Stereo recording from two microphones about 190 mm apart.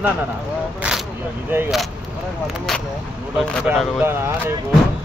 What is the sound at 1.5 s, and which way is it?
Speech, 10° right (ahead or behind).